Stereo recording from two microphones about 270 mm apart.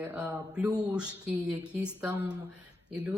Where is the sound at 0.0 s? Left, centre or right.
Centre.